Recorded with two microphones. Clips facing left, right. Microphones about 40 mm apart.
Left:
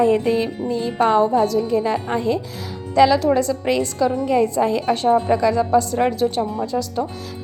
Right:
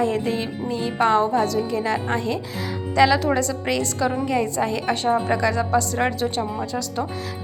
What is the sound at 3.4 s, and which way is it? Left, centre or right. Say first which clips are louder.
A woman's voice: left 4 dB; centre.